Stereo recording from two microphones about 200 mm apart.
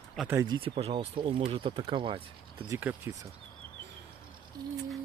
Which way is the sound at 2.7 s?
10° right (ahead or behind).